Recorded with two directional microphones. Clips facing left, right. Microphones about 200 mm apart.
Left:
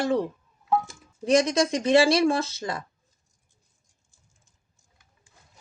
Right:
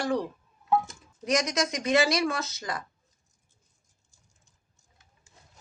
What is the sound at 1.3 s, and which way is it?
Speech, 30° left (ahead or behind).